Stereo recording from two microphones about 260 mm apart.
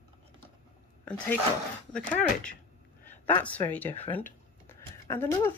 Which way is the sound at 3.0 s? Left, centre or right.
Left.